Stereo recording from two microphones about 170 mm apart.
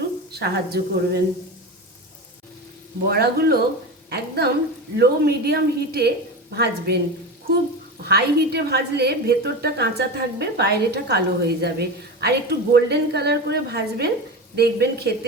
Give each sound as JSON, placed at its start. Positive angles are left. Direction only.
{"t": 0.3, "sound": "a woman's voice", "side_deg": -70}
{"t": 3.1, "sound": "a woman's voice", "side_deg": -65}
{"t": 8.0, "sound": "a woman's voice", "side_deg": -70}